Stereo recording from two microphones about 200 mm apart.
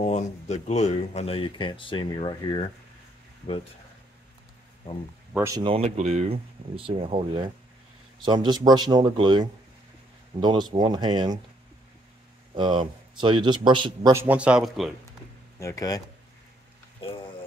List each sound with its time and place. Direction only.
0.0 s speech: 35° left (ahead or behind)
5.3 s speech: 10° right (ahead or behind)
5.6 s speech: 30° right (ahead or behind)
12.5 s speech: 25° right (ahead or behind)
14.1 s speech: 10° right (ahead or behind)
15.6 s speech: 15° left (ahead or behind)